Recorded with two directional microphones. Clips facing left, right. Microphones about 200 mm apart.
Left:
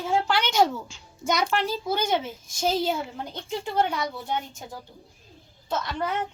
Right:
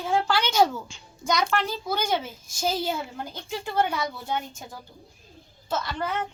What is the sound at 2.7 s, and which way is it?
A child's voice, centre (ahead or behind).